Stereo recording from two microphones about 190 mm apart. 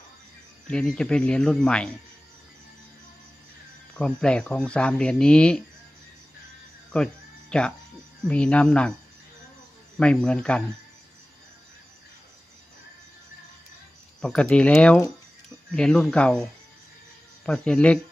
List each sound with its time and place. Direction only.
0.7 s speech: 5° left (ahead or behind)
3.9 s speech: 5° left (ahead or behind)
6.9 s speech: 5° left (ahead or behind)
10.0 s speech: 5° left (ahead or behind)
14.2 s speech: 5° left (ahead or behind)